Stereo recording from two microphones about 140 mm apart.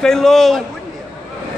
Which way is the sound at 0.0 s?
5° left (ahead or behind).